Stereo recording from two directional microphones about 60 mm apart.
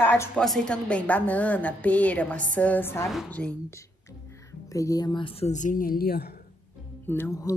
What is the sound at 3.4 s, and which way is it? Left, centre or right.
Speech, centre.